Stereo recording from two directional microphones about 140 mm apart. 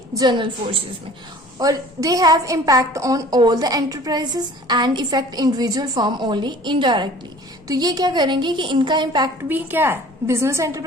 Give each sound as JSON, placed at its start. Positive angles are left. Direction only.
{"t": 0.1, "sound": "a woman's voice", "side_deg": -30}
{"t": 9.5, "sound": "a woman's voice", "side_deg": -15}